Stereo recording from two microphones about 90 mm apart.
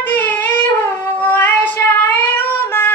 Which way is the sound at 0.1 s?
20° left (ahead or behind).